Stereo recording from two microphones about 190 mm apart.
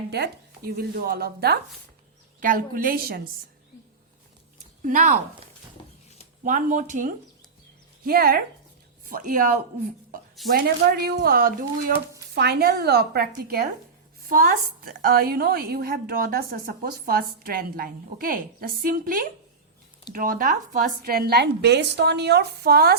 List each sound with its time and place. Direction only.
0.1 s a woman's voice: 55° right (ahead or behind)
4.8 s speech: 40° right (ahead or behind)
6.4 s a woman's voice: 45° right (ahead or behind)